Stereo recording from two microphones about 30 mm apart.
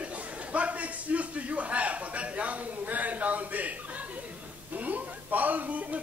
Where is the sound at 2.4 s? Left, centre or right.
Right.